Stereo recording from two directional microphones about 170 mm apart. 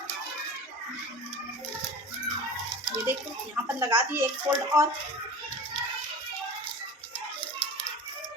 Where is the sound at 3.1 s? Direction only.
10° right (ahead or behind).